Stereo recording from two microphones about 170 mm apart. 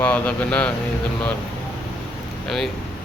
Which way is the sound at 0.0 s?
10° left (ahead or behind).